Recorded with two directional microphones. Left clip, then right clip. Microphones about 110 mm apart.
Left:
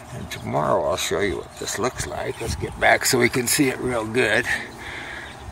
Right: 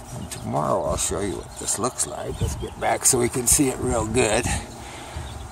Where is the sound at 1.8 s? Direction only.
30° right (ahead or behind).